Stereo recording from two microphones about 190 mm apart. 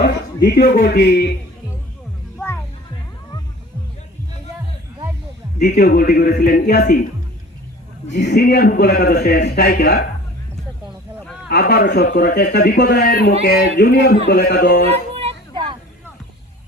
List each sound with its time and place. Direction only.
0.4 s a man's voice: 50° left (ahead or behind)
5.5 s a man's voice: 50° left (ahead or behind)
8.1 s a man's voice: 60° left (ahead or behind)
11.4 s a man's voice: 55° left (ahead or behind)
15.1 s a sound: 30° right (ahead or behind)